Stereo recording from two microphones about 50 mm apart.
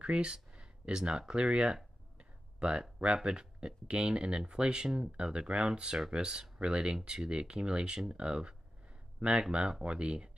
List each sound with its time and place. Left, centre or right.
0.0 s speech: centre
2.1 s a sound: centre
3.3 s speech: centre